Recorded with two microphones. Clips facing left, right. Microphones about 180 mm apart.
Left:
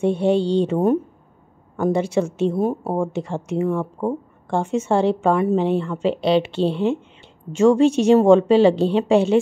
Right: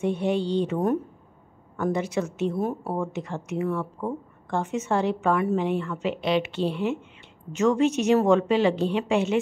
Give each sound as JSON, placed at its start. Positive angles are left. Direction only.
{"t": 0.0, "sound": "a woman's voice", "side_deg": 30}